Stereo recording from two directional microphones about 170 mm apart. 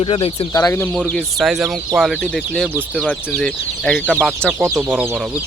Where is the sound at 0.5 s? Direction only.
15° left (ahead or behind); by 5.2 s 10° right (ahead or behind).